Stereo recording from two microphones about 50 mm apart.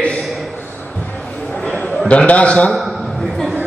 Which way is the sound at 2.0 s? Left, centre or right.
Left.